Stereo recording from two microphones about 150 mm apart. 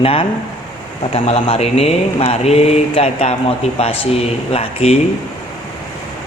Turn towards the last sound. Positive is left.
turn(degrees=40)  # may be behind; listen again after turning